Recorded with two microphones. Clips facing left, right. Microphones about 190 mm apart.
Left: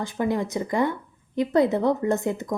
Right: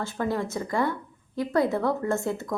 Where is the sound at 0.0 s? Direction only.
15° left (ahead or behind).